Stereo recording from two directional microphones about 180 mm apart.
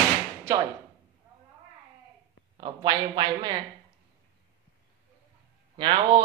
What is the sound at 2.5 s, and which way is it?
Speech, 25° right (ahead or behind).